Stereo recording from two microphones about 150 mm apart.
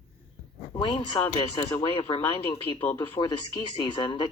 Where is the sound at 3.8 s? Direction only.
30° left (ahead or behind).